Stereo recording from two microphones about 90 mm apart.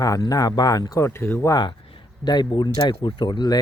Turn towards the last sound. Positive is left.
turn(degrees=55)  # may be behind; listen again after turning